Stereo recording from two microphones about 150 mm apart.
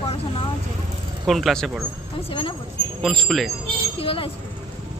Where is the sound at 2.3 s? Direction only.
35° left (ahead or behind).